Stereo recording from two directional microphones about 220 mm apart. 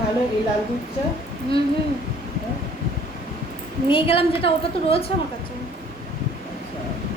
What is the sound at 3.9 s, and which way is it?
A woman's voice, 25° left (ahead or behind).